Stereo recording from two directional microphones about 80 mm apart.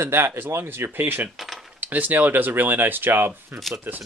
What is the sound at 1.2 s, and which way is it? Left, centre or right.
Speech, centre.